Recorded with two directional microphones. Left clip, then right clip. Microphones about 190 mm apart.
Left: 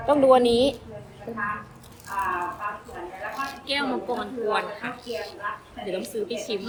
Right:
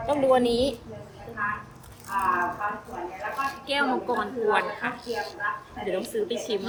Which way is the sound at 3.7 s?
Centre (ahead or behind).